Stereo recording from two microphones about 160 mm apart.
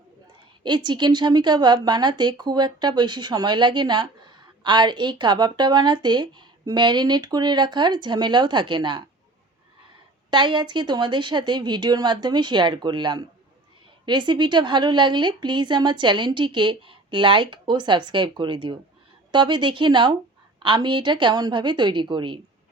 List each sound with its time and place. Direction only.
0.6 s a woman's voice: 30° right (ahead or behind)
10.2 s a woman's voice: 30° right (ahead or behind)